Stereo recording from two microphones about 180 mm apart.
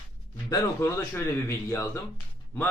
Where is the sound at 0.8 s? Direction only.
15° left (ahead or behind).